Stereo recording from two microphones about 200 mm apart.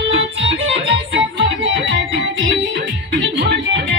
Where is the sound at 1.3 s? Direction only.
65° right (ahead or behind).